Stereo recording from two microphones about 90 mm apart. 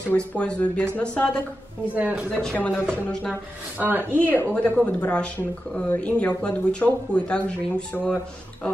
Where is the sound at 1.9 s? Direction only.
15° right (ahead or behind).